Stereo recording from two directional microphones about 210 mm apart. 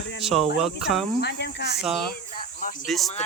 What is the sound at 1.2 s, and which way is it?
Speech, 50° left (ahead or behind).